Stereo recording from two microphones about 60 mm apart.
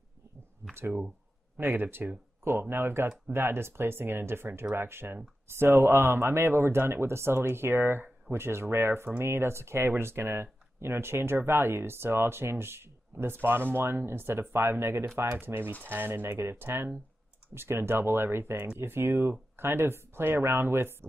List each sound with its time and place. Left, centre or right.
0.7 s speech: right